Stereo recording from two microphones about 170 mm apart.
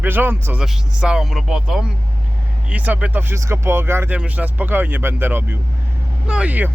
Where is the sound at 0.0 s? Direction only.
10° right (ahead or behind).